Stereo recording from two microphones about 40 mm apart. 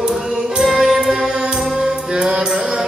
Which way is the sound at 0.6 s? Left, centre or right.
Centre.